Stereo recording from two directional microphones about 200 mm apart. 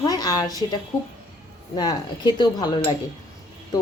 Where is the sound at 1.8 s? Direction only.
20° left (ahead or behind).